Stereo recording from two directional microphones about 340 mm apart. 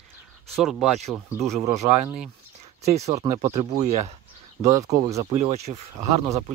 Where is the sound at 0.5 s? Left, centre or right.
Centre.